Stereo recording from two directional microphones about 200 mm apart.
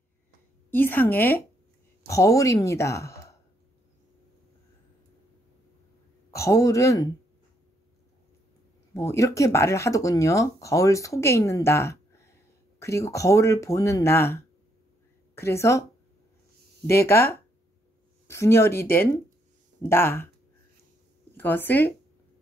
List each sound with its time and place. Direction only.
0.7 s speech: 10° left (ahead or behind)
6.3 s a man's voice: 15° left (ahead or behind)
8.9 s speech: 15° left (ahead or behind)
16.8 s speech: 10° left (ahead or behind)
21.4 s speech: 10° left (ahead or behind)